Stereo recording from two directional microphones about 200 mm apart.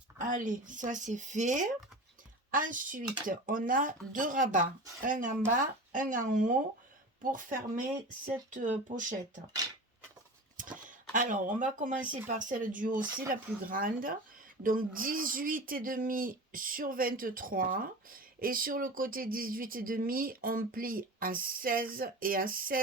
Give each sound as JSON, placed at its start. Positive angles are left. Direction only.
{"t": 0.2, "sound": "speech", "side_deg": -40}
{"t": 10.6, "sound": "speech", "side_deg": -40}